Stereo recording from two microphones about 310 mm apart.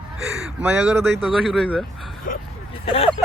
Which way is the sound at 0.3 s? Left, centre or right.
Centre.